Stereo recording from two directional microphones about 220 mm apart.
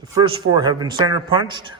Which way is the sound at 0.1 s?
20° right (ahead or behind).